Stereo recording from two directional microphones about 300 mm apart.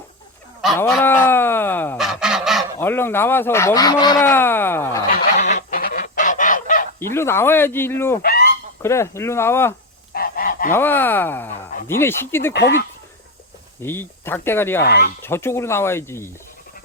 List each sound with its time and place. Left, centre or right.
0.6 s goose: centre
2.8 s speech: centre
5.0 s goose: left
7.1 s speech: centre
8.2 s goose: left
8.8 s speech: centre
10.1 s goose: left
10.8 s speech: centre
12.5 s speech: left
13.8 s speech: centre
14.8 s speech: left
15.2 s speech: centre